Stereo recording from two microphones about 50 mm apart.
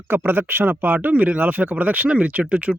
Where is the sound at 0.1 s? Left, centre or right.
Right.